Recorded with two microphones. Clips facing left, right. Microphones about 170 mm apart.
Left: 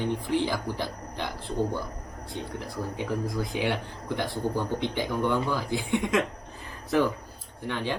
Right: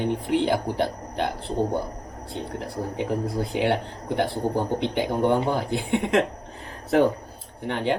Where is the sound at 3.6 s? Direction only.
55° right (ahead or behind).